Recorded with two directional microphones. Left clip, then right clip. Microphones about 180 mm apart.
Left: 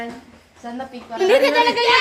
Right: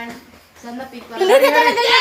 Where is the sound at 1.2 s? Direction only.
10° left (ahead or behind).